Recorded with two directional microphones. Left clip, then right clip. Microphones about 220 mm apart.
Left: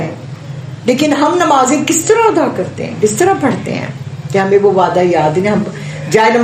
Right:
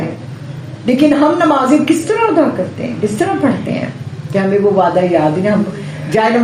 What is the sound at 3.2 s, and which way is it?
Speech, 40° left (ahead or behind).